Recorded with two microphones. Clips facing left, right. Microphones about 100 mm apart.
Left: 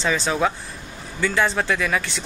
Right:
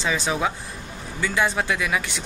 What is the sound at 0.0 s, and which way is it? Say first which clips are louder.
Speech: left 2 dB; 10° right (ahead or behind).